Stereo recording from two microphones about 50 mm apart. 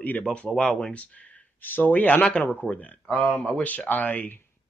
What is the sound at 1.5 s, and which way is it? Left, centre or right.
Speech, left.